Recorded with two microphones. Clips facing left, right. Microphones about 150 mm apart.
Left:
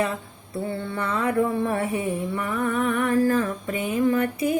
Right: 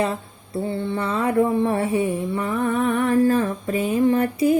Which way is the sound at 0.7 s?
25° right (ahead or behind).